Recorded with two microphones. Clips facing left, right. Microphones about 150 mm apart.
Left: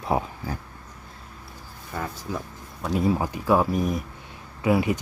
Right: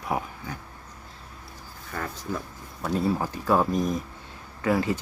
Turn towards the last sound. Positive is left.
turn(degrees=15)  # may be behind; listen again after turning